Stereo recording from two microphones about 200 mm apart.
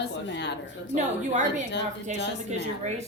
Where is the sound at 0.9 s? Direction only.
35° right (ahead or behind).